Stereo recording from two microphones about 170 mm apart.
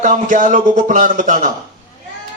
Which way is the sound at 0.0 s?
50° right (ahead or behind).